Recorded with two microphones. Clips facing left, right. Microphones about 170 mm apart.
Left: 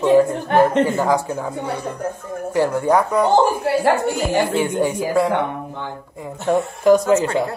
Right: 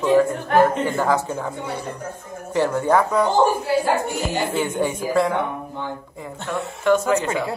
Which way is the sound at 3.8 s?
60° left (ahead or behind).